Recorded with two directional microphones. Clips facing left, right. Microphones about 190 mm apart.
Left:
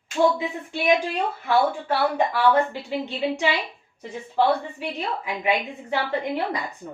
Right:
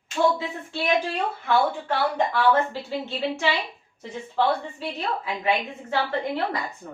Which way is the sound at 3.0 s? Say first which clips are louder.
Left 4 dB; 15° left (ahead or behind).